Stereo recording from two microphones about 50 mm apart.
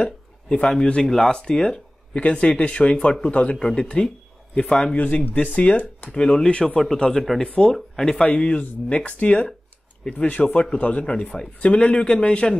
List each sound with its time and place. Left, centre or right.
0.0 s a sound: left
0.8 s speech: left
4.9 s speech: left
6.1 s speech: centre